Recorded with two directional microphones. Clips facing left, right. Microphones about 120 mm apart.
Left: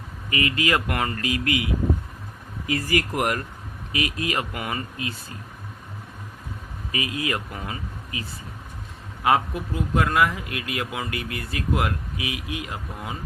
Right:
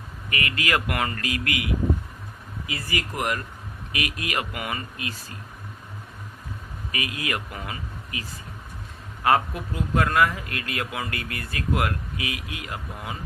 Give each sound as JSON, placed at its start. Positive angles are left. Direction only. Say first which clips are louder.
{"t": 0.3, "sound": "speech", "louder": "left 3 dB", "side_deg": 25}
{"t": 2.6, "sound": "speech", "louder": "left 7 dB", "side_deg": 45}
{"t": 3.9, "sound": "speech", "louder": "left 3 dB", "side_deg": 30}
{"t": 6.9, "sound": "speech", "louder": "left 3 dB", "side_deg": 25}